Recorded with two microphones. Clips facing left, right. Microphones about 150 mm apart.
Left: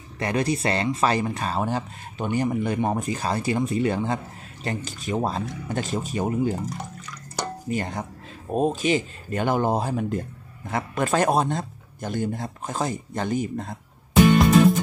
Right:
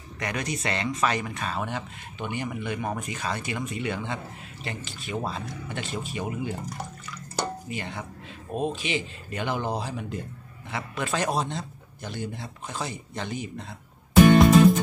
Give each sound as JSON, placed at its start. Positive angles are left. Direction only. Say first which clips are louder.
{"t": 0.2, "sound": "speech", "louder": "left 7 dB", "side_deg": 30}
{"t": 6.7, "sound": "water", "louder": "left 2 dB", "side_deg": 0}
{"t": 7.6, "sound": "a man's voice", "louder": "left 7 dB", "side_deg": 40}